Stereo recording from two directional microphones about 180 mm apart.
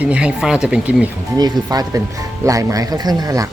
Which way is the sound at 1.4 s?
20° right (ahead or behind).